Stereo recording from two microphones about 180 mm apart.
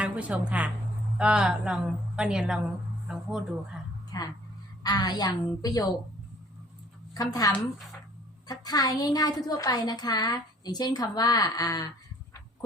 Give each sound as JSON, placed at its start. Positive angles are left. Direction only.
{"t": 0.0, "sound": "a woman's voice", "side_deg": -5}
{"t": 4.1, "sound": "a woman's voice", "side_deg": 20}
{"t": 7.1, "sound": "a woman's voice", "side_deg": 20}